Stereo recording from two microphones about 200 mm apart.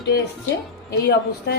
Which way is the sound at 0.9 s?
60° left (ahead or behind).